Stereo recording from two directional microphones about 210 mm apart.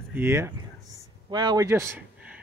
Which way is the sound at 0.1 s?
10° right (ahead or behind).